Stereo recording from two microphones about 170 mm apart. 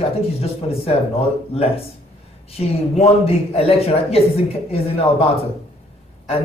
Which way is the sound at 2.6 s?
35° left (ahead or behind).